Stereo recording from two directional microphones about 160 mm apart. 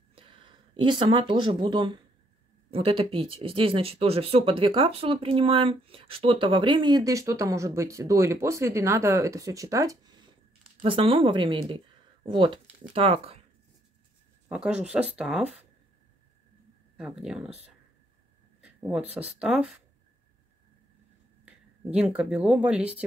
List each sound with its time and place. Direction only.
0.1 s speech: 35° right (ahead or behind)
14.5 s speech: 5° right (ahead or behind)
16.9 s speech: 5° right (ahead or behind)
18.8 s speech: 5° right (ahead or behind)
21.5 s speech: 5° right (ahead or behind)